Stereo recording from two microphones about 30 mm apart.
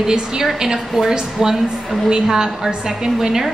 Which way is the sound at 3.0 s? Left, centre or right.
Right.